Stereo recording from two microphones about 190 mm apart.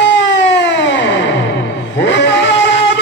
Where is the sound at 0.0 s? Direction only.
65° left (ahead or behind).